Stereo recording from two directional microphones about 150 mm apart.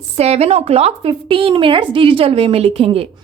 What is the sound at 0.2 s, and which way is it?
A woman's voice, 45° right (ahead or behind).